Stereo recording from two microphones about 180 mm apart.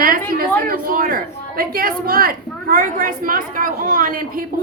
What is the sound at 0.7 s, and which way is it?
A woman's voice, 50° right (ahead or behind).